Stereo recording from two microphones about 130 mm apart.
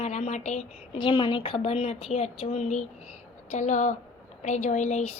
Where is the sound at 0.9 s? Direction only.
40° left (ahead or behind).